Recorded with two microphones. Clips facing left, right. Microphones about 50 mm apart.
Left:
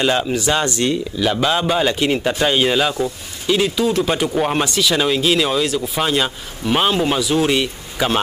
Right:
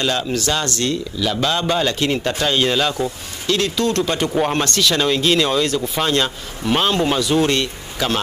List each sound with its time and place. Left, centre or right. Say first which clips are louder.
0.0 s a man's voice: left 3 dB; centre